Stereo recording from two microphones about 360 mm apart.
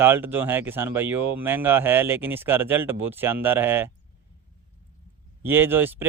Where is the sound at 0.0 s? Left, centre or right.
Centre.